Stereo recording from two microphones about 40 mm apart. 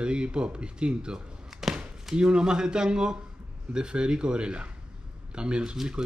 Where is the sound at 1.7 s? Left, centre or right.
Centre.